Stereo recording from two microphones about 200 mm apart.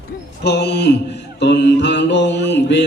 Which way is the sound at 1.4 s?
60° left (ahead or behind).